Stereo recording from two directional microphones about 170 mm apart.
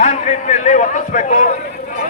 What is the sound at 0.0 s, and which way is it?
A man's voice, 40° left (ahead or behind).